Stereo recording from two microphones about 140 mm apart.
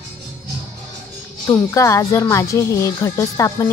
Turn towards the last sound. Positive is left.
turn(degrees=20)  # may be behind; listen again after turning